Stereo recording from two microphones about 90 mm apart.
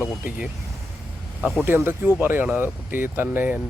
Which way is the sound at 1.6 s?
25° right (ahead or behind).